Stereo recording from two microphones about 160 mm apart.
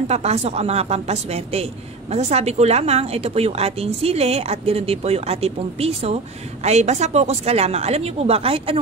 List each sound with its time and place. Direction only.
0.1 s a woman's voice: 40° right (ahead or behind)